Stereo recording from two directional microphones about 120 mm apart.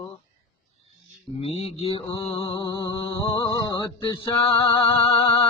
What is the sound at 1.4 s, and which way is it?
Mantra, 55° left (ahead or behind).